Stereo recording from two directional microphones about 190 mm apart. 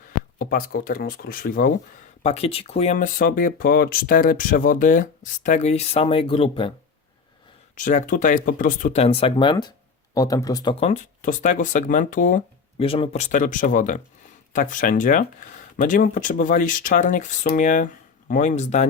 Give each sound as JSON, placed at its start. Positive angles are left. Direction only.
{"t": 0.3, "sound": "speech", "side_deg": 50}
{"t": 2.2, "sound": "speech", "side_deg": 35}
{"t": 7.8, "sound": "speech", "side_deg": 40}
{"t": 12.8, "sound": "speech", "side_deg": 30}